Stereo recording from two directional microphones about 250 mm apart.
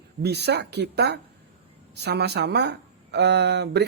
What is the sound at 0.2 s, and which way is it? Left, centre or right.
Speech, right.